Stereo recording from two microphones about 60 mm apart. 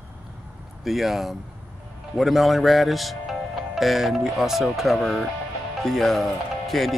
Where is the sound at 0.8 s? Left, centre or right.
Centre.